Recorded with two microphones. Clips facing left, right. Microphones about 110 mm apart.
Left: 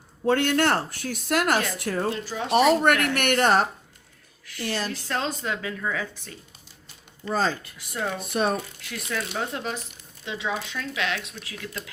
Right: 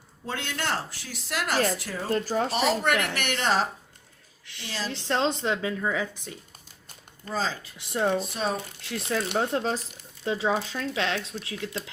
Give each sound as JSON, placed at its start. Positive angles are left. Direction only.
{"t": 0.3, "sound": "speech", "side_deg": 55}
{"t": 2.1, "sound": "speech", "side_deg": -45}
{"t": 2.5, "sound": "speech", "side_deg": 55}
{"t": 4.4, "sound": "a woman's voice", "side_deg": -25}
{"t": 7.3, "sound": "speech", "side_deg": 55}
{"t": 7.8, "sound": "speech", "side_deg": -25}
{"t": 8.3, "sound": "speech", "side_deg": 60}
{"t": 8.8, "sound": "speech", "side_deg": -30}